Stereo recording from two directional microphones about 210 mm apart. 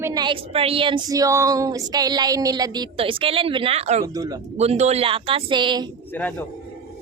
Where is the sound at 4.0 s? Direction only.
15° right (ahead or behind).